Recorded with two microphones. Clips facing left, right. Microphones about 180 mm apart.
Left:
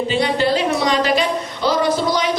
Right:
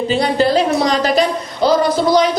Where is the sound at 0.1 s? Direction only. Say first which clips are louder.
Right 4 dB; 40° right (ahead or behind).